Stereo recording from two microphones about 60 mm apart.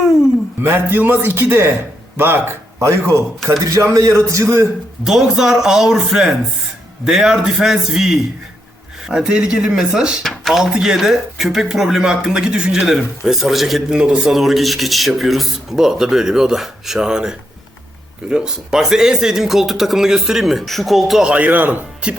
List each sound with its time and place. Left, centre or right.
0.6 s a man's voice: right
5.0 s speech: centre
10.2 s speech: centre
10.6 s speech: centre
13.9 s speech: centre
14.3 s speech: centre
21.2 s speech: right